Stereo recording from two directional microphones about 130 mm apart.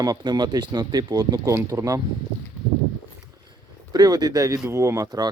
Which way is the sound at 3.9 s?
30° right (ahead or behind).